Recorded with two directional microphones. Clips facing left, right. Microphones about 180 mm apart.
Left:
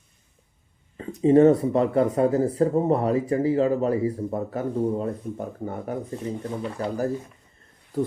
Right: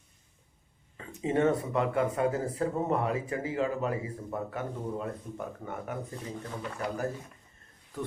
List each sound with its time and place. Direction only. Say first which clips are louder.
0.9 s speech: left 12 dB; 35° left (ahead or behind)